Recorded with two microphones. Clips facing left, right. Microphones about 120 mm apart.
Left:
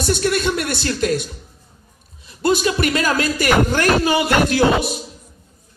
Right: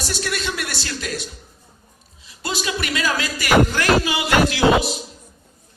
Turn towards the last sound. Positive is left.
turn(degrees=50)  # may be behind; listen again after turning